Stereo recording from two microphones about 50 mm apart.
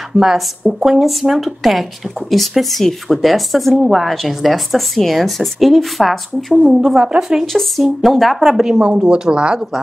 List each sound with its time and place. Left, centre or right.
0.1 s speech: centre
7.0 s speech: centre
7.5 s speech: centre
8.4 s speech: centre